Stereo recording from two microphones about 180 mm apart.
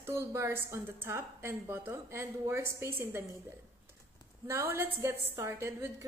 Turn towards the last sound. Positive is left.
turn(degrees=-15)  # may be behind; listen again after turning